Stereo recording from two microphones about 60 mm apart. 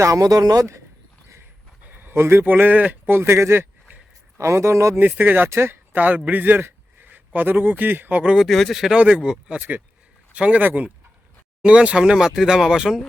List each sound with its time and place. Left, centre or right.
0.0 s speech: right
1.8 s a sound: right
2.4 s speech: right
4.9 s speech: right
5.5 s a man's voice: right
8.2 s speech: centre
8.4 s speech: centre
9.0 s speech: centre